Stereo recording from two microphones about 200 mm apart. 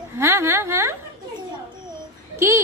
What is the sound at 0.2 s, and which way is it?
Speech, 15° right (ahead or behind).